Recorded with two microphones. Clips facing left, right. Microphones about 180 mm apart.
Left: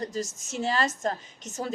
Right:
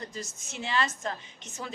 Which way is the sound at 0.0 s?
40° left (ahead or behind).